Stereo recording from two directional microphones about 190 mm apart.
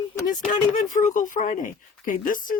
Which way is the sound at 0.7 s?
40° left (ahead or behind).